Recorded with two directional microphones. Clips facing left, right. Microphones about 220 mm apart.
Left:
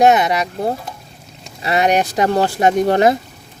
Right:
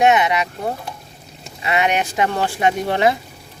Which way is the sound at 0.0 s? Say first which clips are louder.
Left 3 dB; 40° left (ahead or behind).